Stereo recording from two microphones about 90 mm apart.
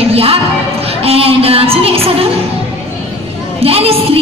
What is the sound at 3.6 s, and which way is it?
Speech, 90° right.